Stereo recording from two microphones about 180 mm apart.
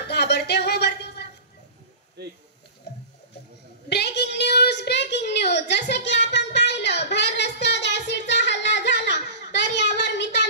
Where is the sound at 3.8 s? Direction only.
70° left (ahead or behind).